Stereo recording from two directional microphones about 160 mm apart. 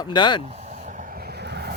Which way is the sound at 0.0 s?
30° left (ahead or behind).